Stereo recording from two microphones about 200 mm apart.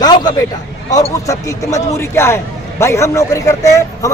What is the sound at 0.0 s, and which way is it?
A man's voice, 20° left (ahead or behind).